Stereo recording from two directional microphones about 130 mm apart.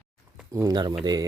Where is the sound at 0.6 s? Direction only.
30° right (ahead or behind).